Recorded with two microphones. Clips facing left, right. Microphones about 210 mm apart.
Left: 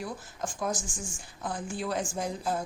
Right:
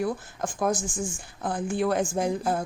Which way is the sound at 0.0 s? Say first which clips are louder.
Right 8 dB; 60° right (ahead or behind).